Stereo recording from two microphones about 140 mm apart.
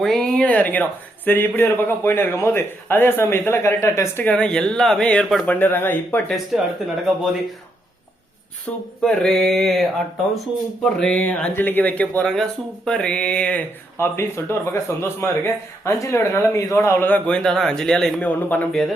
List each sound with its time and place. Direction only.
0.0 s speech: 5° left (ahead or behind)
5.5 s speech: 15° left (ahead or behind)
6.5 s mantra: centre (ahead or behind)
9.0 s mantra: 5° left (ahead or behind)
10.3 s speech: centre (ahead or behind)